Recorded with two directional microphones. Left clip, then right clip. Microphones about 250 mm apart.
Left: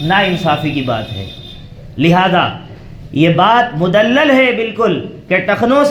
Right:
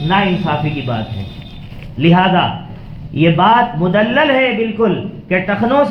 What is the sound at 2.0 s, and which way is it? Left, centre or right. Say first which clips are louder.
A man's voice: left 1 dB; left.